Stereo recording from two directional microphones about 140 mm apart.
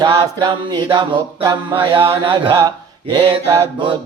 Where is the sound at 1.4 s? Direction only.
35° right (ahead or behind).